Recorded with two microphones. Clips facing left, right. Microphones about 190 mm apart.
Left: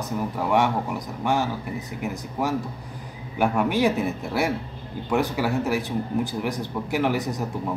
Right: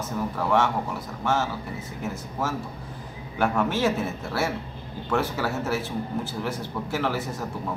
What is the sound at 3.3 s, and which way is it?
A man's voice, 15° left (ahead or behind).